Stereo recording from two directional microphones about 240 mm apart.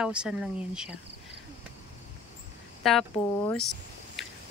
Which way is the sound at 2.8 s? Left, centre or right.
Centre.